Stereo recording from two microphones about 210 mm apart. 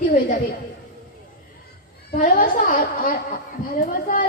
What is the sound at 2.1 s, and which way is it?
A woman's voice, 40° left (ahead or behind).